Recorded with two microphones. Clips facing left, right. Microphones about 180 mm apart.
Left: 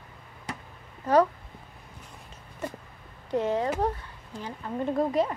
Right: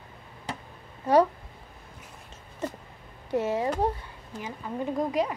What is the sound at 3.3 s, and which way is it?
Speech, 10° right (ahead or behind).